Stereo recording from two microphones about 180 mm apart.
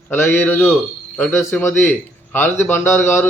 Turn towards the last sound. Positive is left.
turn(degrees=15)  # may be behind; listen again after turning